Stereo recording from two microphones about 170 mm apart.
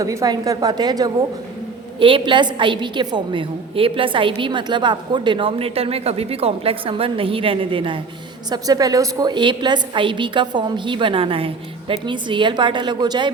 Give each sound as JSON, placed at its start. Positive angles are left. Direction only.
{"t": 0.0, "sound": "a woman's voice", "side_deg": -20}